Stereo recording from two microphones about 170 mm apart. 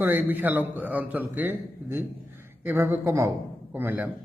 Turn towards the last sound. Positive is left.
turn(degrees=-10)  # may be behind; listen again after turning